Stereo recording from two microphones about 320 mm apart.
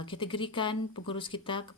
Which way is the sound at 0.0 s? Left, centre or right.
Centre.